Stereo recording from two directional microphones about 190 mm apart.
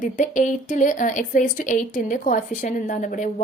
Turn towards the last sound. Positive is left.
turn(degrees=45)  # may be behind; listen again after turning